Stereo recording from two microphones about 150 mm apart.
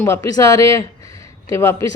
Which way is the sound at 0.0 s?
20° left (ahead or behind).